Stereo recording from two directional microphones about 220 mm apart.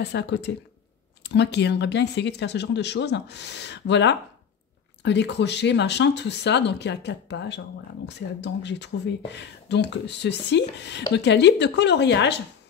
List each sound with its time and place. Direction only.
0.0 s speech: 50° left (ahead or behind)